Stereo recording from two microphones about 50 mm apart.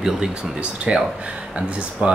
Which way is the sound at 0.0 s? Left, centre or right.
Centre.